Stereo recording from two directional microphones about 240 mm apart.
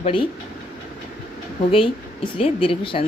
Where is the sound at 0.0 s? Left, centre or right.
Left.